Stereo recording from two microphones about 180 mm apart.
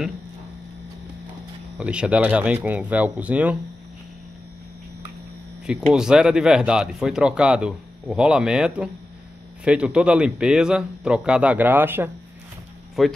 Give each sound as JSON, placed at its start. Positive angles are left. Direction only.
{"t": 1.8, "sound": "speech", "side_deg": -5}
{"t": 5.7, "sound": "speech", "side_deg": -5}
{"t": 13.0, "sound": "speech", "side_deg": 0}